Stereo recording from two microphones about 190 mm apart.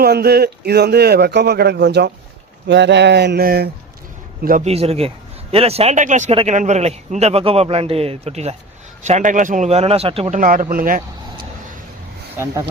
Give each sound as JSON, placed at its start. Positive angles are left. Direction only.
{"t": 0.0, "sound": "a man's voice", "side_deg": -55}
{"t": 4.7, "sound": "a man's voice", "side_deg": -30}
{"t": 10.3, "sound": "speech", "side_deg": -45}